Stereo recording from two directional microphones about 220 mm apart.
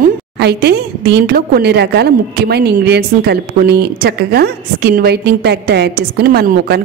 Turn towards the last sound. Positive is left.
turn(degrees=-45)  # may be behind; listen again after turning